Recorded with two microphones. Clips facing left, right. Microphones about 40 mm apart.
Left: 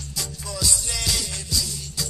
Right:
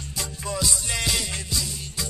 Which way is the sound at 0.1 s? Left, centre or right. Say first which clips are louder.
Right 3 dB; right.